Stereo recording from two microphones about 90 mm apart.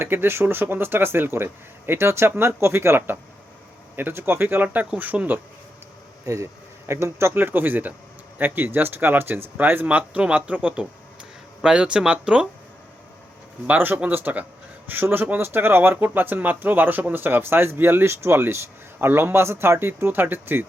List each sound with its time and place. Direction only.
0.0 s speech: 25° right (ahead or behind)
6.2 s speech: 35° right (ahead or behind); by 12.5 s 10° right (ahead or behind)
13.7 s speech: 20° right (ahead or behind)